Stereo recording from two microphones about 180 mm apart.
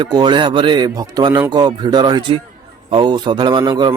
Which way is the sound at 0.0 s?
25° right (ahead or behind).